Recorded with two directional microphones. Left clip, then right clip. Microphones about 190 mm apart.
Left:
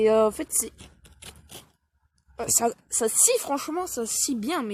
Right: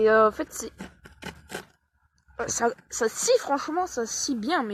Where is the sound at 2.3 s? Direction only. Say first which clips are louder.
Even; 60° left (ahead or behind).